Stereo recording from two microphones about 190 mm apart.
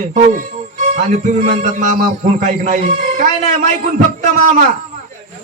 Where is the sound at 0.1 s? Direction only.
40° right (ahead or behind).